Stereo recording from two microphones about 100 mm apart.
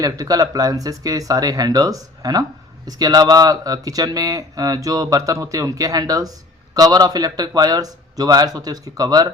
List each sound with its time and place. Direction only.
0.0 s speech: 40° right (ahead or behind)